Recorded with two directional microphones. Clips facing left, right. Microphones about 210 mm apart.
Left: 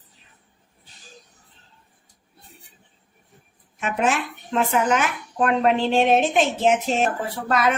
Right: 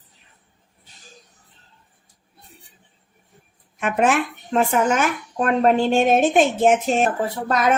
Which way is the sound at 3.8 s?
55° right (ahead or behind).